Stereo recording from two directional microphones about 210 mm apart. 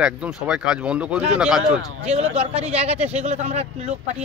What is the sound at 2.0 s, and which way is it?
Speech, 30° right (ahead or behind).